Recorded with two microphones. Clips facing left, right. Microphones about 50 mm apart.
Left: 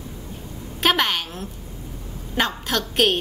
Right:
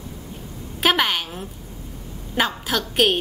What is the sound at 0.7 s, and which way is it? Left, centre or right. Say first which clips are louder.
A woman's voice: right 1 dB; centre.